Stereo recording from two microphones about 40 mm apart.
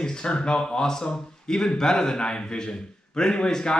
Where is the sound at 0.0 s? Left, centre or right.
Centre.